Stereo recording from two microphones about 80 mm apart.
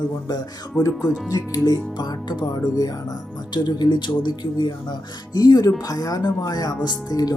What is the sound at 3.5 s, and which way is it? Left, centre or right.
Speech, left.